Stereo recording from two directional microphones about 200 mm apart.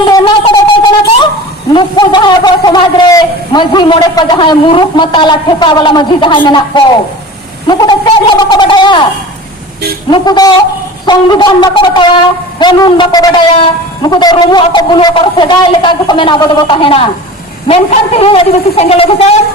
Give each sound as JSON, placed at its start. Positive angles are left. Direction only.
{"t": 0.0, "sound": "a sound", "side_deg": 20}
{"t": 1.7, "sound": "a man's voice", "side_deg": 20}
{"t": 10.1, "sound": "a man's voice", "side_deg": 20}